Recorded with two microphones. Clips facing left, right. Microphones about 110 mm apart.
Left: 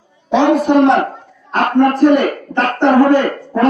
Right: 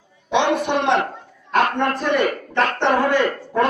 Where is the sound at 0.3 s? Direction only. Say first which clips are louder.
Left 7 dB; 35° left (ahead or behind).